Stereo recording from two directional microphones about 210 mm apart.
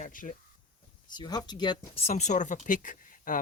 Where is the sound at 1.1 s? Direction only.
20° left (ahead or behind).